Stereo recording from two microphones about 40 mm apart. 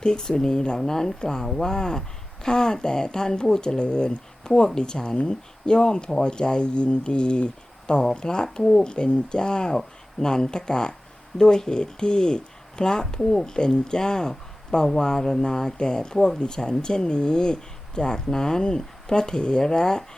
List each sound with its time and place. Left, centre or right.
0.0 s speech: centre
16.1 s speech: centre
16.4 s speech: centre